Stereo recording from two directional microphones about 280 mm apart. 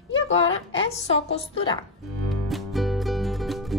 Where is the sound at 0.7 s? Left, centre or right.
Left.